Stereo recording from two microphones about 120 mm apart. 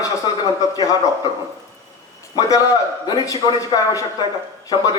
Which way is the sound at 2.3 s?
30° left (ahead or behind).